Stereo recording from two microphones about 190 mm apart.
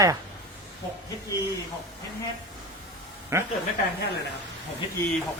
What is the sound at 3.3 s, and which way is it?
Speech, 15° right (ahead or behind).